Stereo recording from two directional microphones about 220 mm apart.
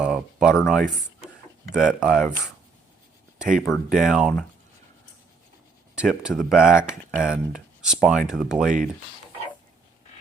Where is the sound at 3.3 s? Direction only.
5° right (ahead or behind).